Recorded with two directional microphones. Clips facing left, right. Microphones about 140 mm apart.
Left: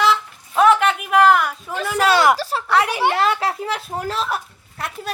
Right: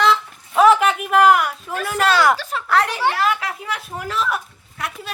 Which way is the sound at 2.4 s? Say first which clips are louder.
Left 3 dB; 35° left (ahead or behind).